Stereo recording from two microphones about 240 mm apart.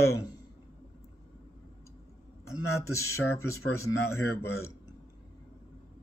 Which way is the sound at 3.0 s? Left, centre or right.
Left.